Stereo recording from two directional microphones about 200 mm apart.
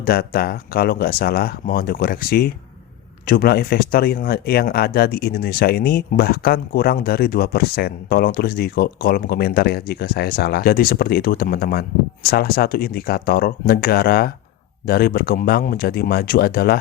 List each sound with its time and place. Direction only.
0.0 s speech: 50° left (ahead or behind)